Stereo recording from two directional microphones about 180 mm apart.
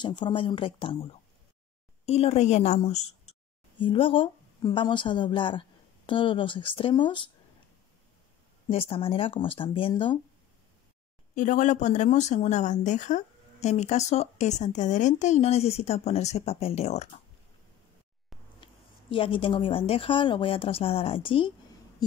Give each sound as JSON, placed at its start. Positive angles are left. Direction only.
{"t": 0.0, "sound": "a woman's voice", "side_deg": 25}
{"t": 8.6, "sound": "a woman's voice", "side_deg": 30}
{"t": 11.3, "sound": "speech", "side_deg": 45}
{"t": 18.6, "sound": "a woman's voice", "side_deg": 30}